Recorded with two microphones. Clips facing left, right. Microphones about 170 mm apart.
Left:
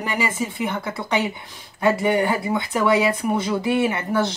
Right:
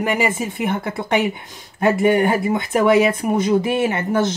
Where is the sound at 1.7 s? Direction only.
50° right (ahead or behind).